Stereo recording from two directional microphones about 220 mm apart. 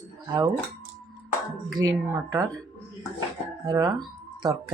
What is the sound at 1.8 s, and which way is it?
Speech, 15° right (ahead or behind).